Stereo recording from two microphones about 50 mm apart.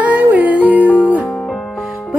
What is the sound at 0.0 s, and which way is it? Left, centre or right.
Music, right.